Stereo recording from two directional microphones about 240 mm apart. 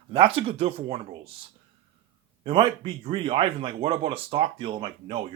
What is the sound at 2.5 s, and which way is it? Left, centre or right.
Speech, right.